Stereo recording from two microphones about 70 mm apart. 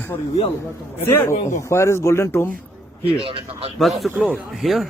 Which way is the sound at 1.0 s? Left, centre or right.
Left.